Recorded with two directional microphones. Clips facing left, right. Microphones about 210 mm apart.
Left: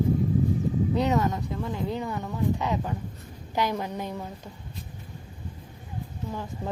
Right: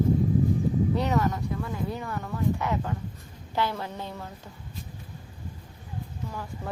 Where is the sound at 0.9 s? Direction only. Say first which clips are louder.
Left 2 dB; 20° left (ahead or behind).